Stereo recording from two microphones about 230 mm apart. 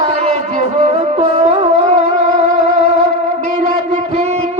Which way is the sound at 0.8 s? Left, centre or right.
Right.